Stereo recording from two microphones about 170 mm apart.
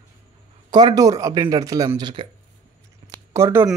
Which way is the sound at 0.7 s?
25° right (ahead or behind).